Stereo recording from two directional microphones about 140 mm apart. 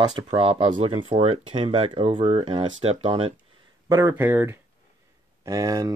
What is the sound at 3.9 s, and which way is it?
Speech, 25° right (ahead or behind).